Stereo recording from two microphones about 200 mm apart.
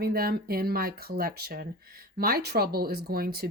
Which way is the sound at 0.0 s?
50° right (ahead or behind).